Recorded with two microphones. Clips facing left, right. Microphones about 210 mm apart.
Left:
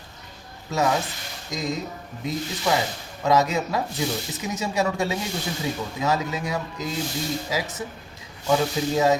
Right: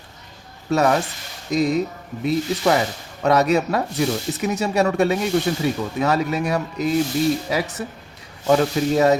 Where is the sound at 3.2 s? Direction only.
65° right (ahead or behind).